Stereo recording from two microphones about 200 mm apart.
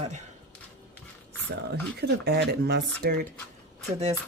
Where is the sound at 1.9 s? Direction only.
55° right (ahead or behind).